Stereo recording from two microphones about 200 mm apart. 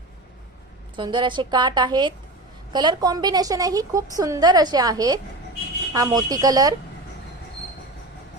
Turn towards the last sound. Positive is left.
turn(degrees=-20)  # may be behind; listen again after turning